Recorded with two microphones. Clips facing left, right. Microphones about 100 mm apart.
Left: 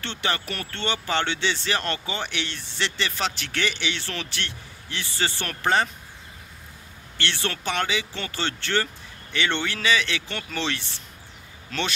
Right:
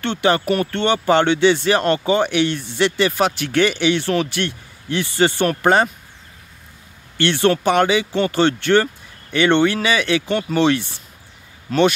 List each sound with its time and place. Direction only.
0.0 s speech: 50° right (ahead or behind)
7.2 s speech: 50° right (ahead or behind)